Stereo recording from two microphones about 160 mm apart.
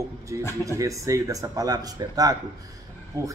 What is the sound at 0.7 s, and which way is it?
A man's voice, 20° right (ahead or behind).